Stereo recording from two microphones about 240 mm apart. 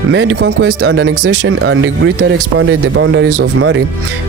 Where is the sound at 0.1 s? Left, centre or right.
Right.